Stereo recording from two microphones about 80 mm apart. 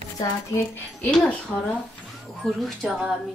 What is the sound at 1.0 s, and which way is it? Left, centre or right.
A woman's voice, centre.